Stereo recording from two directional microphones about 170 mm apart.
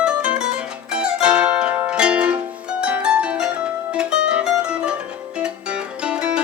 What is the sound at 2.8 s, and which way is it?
Harp, 5° right (ahead or behind).